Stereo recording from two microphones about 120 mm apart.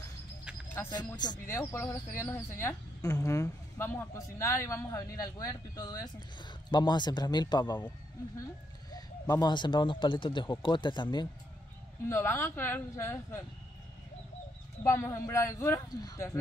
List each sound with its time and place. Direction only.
0.8 s speech: 35° left (ahead or behind)
1.6 s speech: 25° left (ahead or behind)
9.3 s speech: 35° left (ahead or behind)
12.1 s speech: 20° left (ahead or behind)
14.8 s speech: 25° left (ahead or behind)